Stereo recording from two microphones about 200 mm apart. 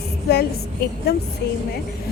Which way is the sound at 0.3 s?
50° left (ahead or behind).